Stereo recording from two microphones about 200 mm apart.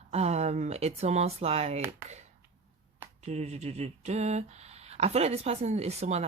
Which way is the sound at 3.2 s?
35° right (ahead or behind).